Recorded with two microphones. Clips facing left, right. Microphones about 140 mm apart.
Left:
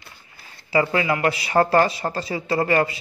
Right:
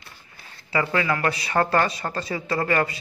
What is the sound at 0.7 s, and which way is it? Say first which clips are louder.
Speech: left 3 dB; 25° left (ahead or behind).